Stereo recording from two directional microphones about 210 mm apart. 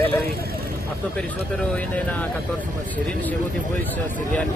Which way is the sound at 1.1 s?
5° left (ahead or behind).